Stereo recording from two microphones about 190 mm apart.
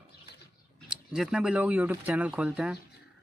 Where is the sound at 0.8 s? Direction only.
5° right (ahead or behind).